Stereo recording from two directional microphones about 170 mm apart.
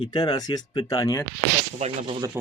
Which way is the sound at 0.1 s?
25° left (ahead or behind).